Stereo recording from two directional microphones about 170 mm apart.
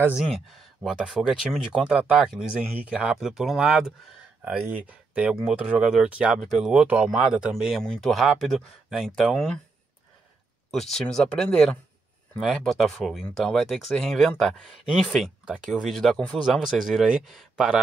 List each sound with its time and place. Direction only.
0.0 s speech: 5° right (ahead or behind)
10.7 s speech: centre (ahead or behind)